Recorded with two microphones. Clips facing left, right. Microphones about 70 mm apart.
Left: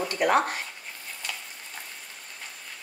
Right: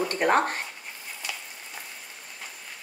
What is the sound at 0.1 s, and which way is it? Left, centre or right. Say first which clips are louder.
Speech: left 1 dB; right.